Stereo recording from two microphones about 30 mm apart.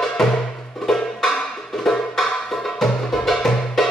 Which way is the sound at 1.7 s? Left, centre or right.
Centre.